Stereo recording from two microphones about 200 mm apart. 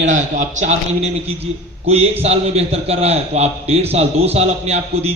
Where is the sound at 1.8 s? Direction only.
30° right (ahead or behind).